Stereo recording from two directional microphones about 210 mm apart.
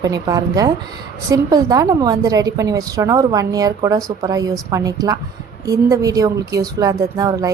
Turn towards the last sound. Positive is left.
turn(degrees=-20)  # may be behind; listen again after turning